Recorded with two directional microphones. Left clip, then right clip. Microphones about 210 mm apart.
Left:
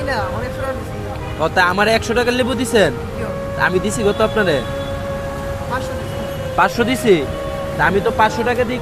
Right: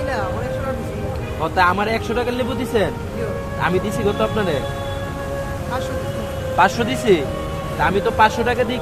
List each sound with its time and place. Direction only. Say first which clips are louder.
1.4 s speech: left 2 dB; 25° left (ahead or behind)
6.6 s speech: left 1 dB; 20° left (ahead or behind)